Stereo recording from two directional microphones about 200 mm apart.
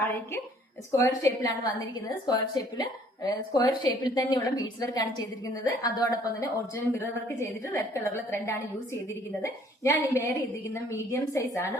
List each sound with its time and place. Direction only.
0.9 s a woman's voice: 15° left (ahead or behind)